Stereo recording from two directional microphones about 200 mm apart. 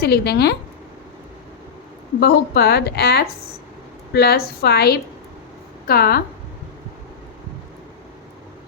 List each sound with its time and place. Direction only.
0.0 s speech: 50° left (ahead or behind)
2.2 s speech: 50° left (ahead or behind)